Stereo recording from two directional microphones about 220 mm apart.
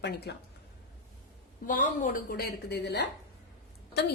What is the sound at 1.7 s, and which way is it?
A woman's voice, 40° left (ahead or behind).